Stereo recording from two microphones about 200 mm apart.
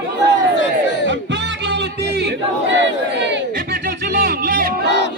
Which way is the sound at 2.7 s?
60° right (ahead or behind).